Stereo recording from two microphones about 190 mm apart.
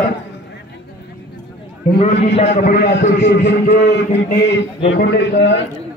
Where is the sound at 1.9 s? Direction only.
35° left (ahead or behind).